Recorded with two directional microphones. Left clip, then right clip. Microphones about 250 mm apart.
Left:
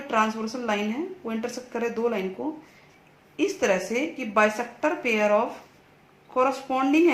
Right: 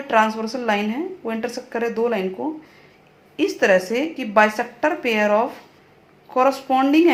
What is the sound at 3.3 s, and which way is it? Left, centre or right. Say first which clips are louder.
A woman's voice: right 7 dB; centre.